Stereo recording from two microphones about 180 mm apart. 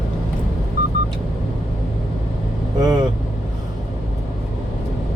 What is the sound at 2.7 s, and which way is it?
Vehicle, 20° right (ahead or behind).